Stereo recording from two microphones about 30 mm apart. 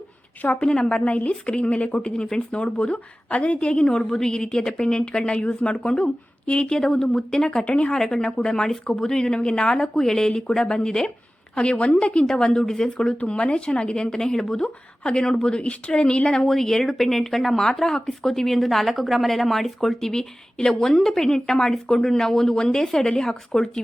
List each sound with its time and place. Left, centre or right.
0.6 s a woman's voice: left
2.9 s a woman's voice: left
3.8 s a woman's voice: centre; by 6.6 s left
6.6 s a woman's voice: left
7.6 s a woman's voice: left
7.9 s a woman's voice: centre
13.1 s a woman's voice: left
16.3 s speech: centre
18.3 s speech: centre
22.5 s a woman's voice: left
22.9 s a woman's voice: centre